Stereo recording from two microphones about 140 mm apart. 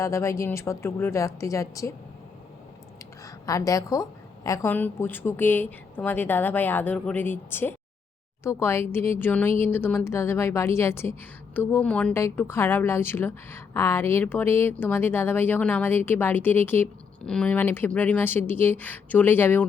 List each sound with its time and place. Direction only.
0.0 s a woman's voice: 20° left (ahead or behind)
3.2 s a woman's voice: 25° left (ahead or behind)